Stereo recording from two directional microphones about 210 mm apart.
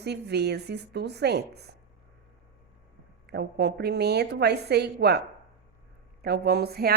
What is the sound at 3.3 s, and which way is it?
A woman's voice, 50° right (ahead or behind).